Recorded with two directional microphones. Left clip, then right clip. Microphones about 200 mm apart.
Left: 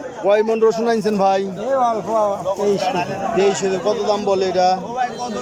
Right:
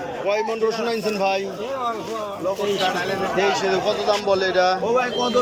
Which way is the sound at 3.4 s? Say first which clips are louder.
Left 3 dB; 15° left (ahead or behind).